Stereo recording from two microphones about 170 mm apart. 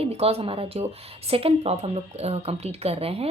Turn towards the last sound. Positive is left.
turn(degrees=-35)  # may be behind; listen again after turning